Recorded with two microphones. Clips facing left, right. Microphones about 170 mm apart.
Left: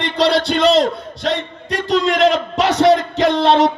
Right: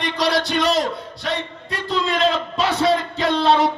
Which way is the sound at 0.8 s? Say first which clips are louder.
Left 6 dB; 80° left.